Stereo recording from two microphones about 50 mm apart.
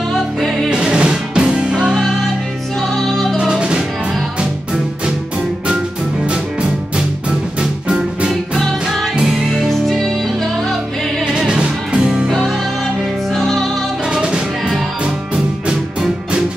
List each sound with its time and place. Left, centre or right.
0.1 s music: centre
0.7 s music: centre
2.9 s music: centre
3.3 s music: centre
8.5 s music: centre
11.3 s music: centre
13.3 s music: centre
14.1 s music: centre